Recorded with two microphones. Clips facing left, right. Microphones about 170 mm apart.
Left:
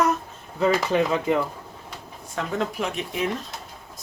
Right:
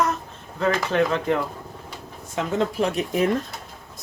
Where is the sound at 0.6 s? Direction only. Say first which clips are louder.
Even; 5° left (ahead or behind).